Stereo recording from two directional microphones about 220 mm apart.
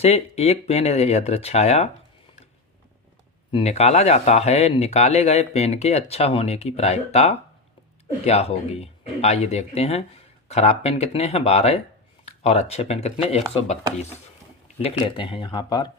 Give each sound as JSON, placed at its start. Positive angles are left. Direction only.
{"t": 0.0, "sound": "speech", "side_deg": 30}
{"t": 3.5, "sound": "speech", "side_deg": 30}
{"t": 14.8, "sound": "speech", "side_deg": 25}